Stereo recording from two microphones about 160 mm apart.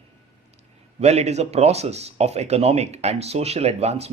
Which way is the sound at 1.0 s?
45° right (ahead or behind).